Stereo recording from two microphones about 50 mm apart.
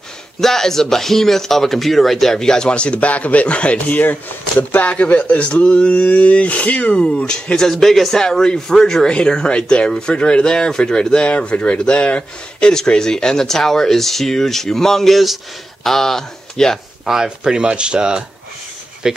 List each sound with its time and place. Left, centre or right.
0.4 s speech: centre; by 4.0 s left
4.0 s speech: left; by 7.7 s centre
7.7 s speech: centre
17.0 s speech: centre
17.4 s speech: centre